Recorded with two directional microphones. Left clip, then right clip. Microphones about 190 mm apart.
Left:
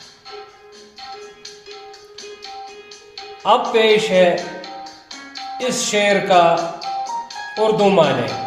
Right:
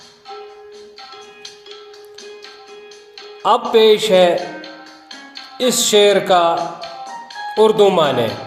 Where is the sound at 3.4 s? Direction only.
45° right (ahead or behind).